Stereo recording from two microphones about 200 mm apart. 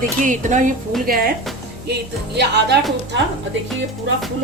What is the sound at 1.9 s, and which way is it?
Speech, 55° right (ahead or behind).